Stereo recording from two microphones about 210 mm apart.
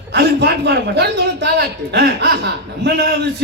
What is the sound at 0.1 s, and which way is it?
A man's voice, 55° right (ahead or behind).